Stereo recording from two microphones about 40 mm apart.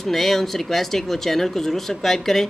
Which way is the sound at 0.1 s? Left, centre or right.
Centre.